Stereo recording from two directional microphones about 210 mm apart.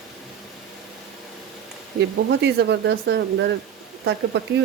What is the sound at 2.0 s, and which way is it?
Speech, 55° right (ahead or behind).